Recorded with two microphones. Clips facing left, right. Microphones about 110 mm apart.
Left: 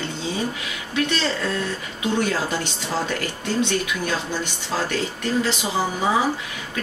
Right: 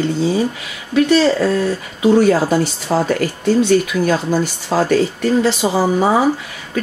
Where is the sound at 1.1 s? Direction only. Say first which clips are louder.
Right 11 dB; 40° right (ahead or behind).